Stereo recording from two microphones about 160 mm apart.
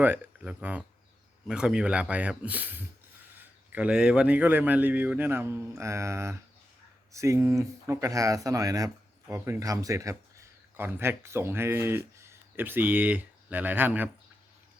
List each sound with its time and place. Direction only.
0.0 s a man's voice: 10° right (ahead or behind)